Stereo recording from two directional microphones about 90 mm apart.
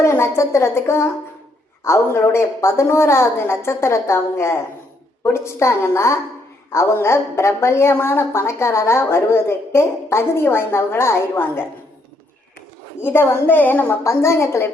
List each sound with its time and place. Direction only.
0.0 s a woman's voice: 30° left (ahead or behind)
13.0 s a woman's voice: 25° left (ahead or behind)
14.0 s a woman's voice: 30° left (ahead or behind)